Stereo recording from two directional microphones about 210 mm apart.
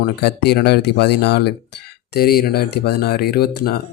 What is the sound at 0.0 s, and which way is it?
Speech, 50° left (ahead or behind).